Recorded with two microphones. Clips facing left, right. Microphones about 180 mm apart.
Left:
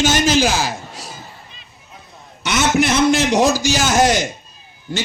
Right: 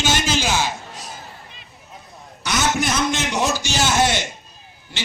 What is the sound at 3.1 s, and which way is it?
A man's voice, 35° left (ahead or behind).